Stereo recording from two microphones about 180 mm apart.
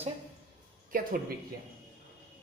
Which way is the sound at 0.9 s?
50° right (ahead or behind).